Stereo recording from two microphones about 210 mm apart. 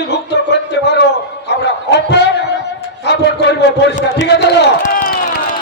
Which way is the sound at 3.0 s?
55° left (ahead or behind).